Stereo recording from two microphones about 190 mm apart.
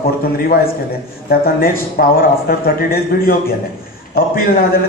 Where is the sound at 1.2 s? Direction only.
50° left (ahead or behind).